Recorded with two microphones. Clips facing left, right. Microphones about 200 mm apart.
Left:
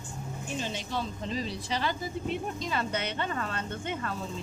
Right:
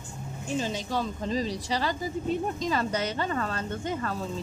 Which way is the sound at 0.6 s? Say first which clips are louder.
Right 4 dB; 40° right (ahead or behind).